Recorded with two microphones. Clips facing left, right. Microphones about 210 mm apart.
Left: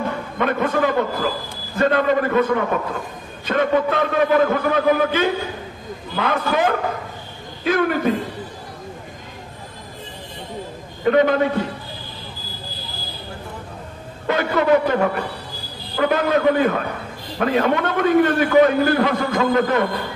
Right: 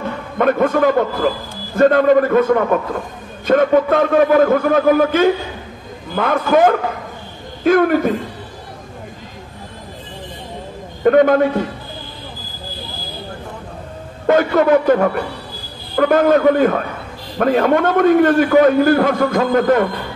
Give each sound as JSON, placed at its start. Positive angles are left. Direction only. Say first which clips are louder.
{"t": 0.4, "sound": "a man's voice", "louder": "right 6 dB", "side_deg": -50}
{"t": 11.1, "sound": "a man's voice", "louder": "right 5 dB", "side_deg": -50}
{"t": 14.2, "sound": "a man's voice", "louder": "right 6 dB", "side_deg": -50}